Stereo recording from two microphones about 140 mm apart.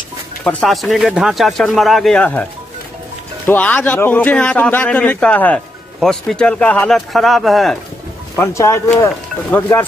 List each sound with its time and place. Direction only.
0.4 s speech: 10° left (ahead or behind)
3.4 s a man's voice: 10° left (ahead or behind)
8.4 s a man's voice: 20° left (ahead or behind)